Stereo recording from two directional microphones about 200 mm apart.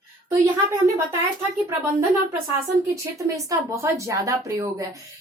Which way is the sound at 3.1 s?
15° right (ahead or behind).